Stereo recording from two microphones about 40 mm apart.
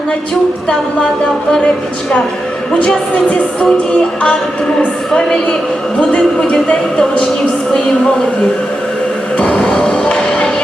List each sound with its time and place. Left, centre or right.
2.8 s speech: left
5.1 s speech: left
9.4 s music: left